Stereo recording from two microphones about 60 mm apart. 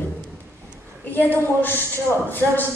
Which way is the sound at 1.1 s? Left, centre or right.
Left.